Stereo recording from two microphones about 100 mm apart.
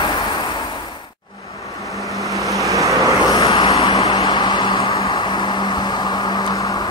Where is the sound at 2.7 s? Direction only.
35° right (ahead or behind).